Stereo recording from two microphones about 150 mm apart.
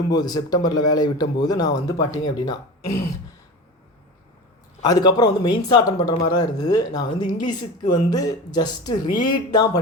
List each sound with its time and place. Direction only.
0.1 s speech: 25° left (ahead or behind)
4.9 s speech: 25° left (ahead or behind)